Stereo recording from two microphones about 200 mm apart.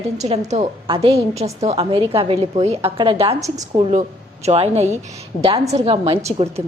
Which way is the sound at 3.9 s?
35° right (ahead or behind).